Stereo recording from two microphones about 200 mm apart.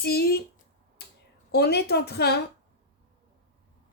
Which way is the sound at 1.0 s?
55° left (ahead or behind).